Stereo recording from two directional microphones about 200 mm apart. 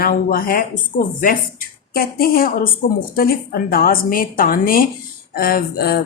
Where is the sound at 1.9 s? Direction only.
45° left (ahead or behind).